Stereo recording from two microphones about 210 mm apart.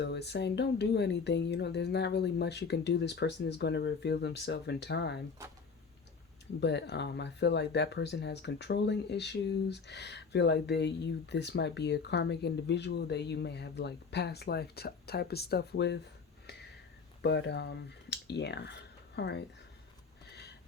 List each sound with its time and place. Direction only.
0.0 s speech: 55° left (ahead or behind)
6.6 s speech: 55° left (ahead or behind)
17.2 s speech: 55° left (ahead or behind)